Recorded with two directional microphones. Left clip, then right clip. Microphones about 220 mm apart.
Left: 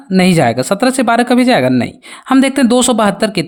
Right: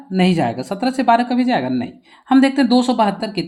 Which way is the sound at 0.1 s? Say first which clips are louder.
Left 7 dB; 45° left (ahead or behind).